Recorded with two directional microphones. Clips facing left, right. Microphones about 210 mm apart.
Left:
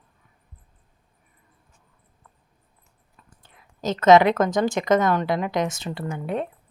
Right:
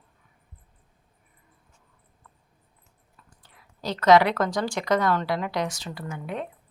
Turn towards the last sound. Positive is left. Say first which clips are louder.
# left 5 dB
turn(degrees=35)  # may be behind; listen again after turning